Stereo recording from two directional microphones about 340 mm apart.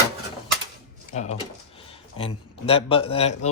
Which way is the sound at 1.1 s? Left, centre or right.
Centre.